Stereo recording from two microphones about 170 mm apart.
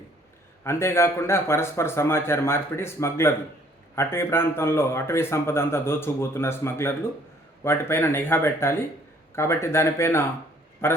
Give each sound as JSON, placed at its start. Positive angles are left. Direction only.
{"t": 0.6, "sound": "a man's voice", "side_deg": 15}